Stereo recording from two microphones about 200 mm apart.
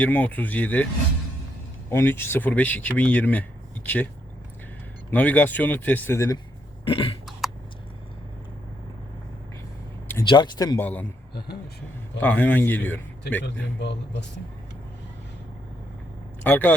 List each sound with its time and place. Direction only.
0.0 s speech: 5° left (ahead or behind)
1.9 s speech: 10° left (ahead or behind)
5.1 s speech: 10° left (ahead or behind)
6.8 s a sound: 25° left (ahead or behind)
10.2 s speech: 20° left (ahead or behind)
12.2 s speech: 10° left (ahead or behind)
13.4 s a man's voice: 60° left (ahead or behind)
16.4 s speech: 10° left (ahead or behind)